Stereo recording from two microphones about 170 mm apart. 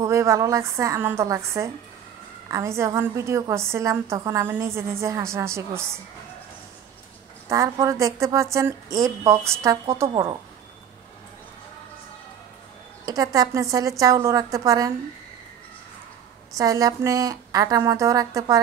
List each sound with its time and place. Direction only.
0.0 s a woman's voice: 15° right (ahead or behind)
7.4 s a woman's voice: 20° right (ahead or behind)
13.0 s a woman's voice: 20° right (ahead or behind)
16.5 s a woman's voice: 20° right (ahead or behind)